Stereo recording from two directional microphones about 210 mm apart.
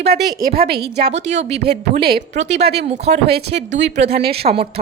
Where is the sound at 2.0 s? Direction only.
45° right (ahead or behind).